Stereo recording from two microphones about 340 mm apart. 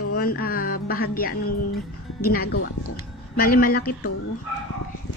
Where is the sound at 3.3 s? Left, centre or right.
Left.